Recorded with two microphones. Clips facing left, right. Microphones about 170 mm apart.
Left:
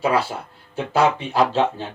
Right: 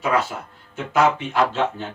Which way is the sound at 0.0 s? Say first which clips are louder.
Left 1 dB; 30° left (ahead or behind).